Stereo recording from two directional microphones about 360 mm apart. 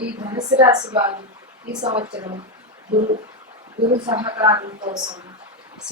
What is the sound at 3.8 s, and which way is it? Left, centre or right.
A woman's voice, centre.